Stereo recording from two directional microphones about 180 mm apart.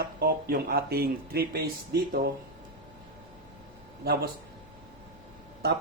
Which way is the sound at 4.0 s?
60° right (ahead or behind).